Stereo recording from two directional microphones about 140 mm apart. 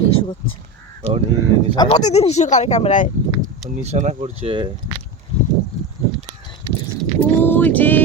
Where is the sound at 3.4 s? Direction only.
55° right (ahead or behind).